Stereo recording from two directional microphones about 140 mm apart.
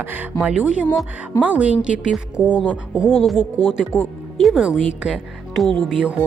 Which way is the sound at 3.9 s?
15° left (ahead or behind).